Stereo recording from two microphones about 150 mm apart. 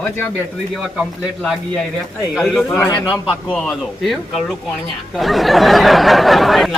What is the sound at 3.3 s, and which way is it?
Speech, 5° left (ahead or behind).